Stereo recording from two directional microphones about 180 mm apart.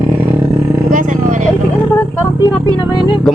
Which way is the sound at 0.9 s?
45° right (ahead or behind).